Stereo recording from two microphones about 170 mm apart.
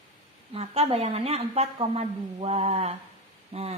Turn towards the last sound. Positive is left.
turn(degrees=-35)  # may be behind; listen again after turning